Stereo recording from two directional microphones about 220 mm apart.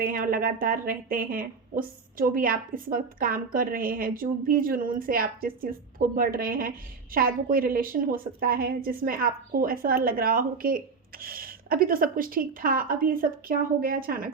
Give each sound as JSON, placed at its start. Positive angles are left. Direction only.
{"t": 0.0, "sound": "speech", "side_deg": -40}